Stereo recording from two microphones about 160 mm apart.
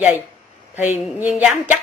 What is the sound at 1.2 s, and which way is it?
Speech, 10° right (ahead or behind).